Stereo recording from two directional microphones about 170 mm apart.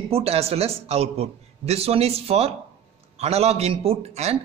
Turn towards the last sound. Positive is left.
turn(degrees=-40)  # may be behind; listen again after turning